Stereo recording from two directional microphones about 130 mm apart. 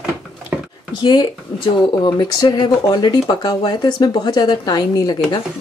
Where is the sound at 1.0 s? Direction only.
35° left (ahead or behind).